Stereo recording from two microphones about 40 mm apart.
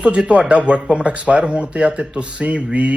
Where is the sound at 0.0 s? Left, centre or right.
Right.